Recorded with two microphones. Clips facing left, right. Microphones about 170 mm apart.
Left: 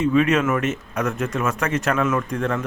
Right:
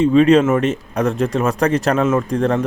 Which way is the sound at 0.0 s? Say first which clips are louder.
Right 7 dB; 30° right (ahead or behind).